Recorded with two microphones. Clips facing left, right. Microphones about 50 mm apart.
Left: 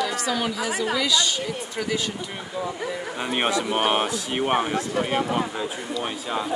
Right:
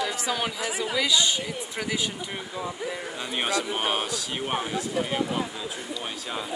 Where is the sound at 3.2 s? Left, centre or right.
Left.